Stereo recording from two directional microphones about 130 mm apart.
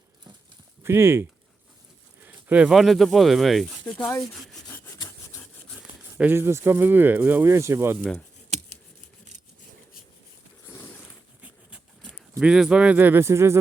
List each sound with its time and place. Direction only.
0.8 s speech: 20° right (ahead or behind); by 4.1 s 5° left (ahead or behind)
6.1 s speech: 15° right (ahead or behind)
12.4 s speech: 5° right (ahead or behind); by 13.6 s 20° right (ahead or behind)